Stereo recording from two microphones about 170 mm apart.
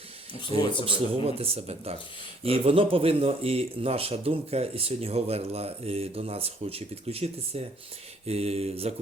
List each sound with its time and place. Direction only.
0.9 s speech: 35° right (ahead or behind)